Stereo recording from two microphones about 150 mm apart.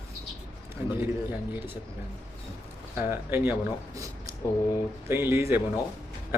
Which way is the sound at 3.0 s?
15° right (ahead or behind).